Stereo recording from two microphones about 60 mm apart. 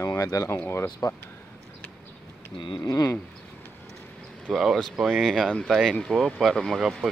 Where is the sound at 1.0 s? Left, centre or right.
Left.